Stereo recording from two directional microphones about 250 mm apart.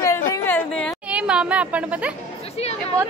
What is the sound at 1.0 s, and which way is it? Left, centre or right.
Speech, centre.